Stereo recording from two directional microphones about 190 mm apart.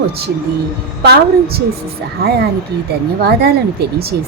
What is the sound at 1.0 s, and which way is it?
Speech, 55° right (ahead or behind).